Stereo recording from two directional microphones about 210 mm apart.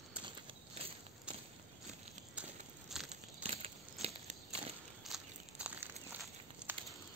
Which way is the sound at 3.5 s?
30° right (ahead or behind).